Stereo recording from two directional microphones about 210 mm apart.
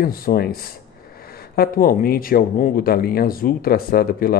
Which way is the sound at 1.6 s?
45° left (ahead or behind).